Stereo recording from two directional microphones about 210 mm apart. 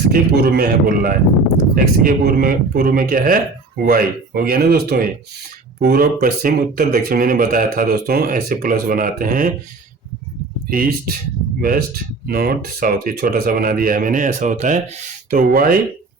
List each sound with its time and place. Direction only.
0.1 s speech: 45° right (ahead or behind)
10.7 s speech: 45° right (ahead or behind)
12.3 s speech: 45° right (ahead or behind)